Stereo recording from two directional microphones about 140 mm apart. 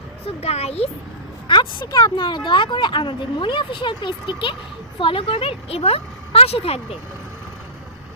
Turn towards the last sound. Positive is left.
turn(degrees=45)  # may be behind; listen again after turning